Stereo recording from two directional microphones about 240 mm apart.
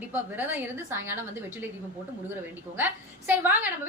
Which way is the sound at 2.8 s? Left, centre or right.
Centre.